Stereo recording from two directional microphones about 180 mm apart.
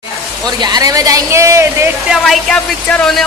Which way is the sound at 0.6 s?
20° right (ahead or behind).